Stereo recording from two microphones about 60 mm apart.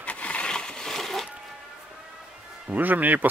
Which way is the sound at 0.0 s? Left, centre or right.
Left.